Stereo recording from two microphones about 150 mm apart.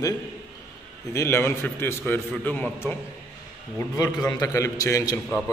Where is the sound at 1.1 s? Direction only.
15° left (ahead or behind).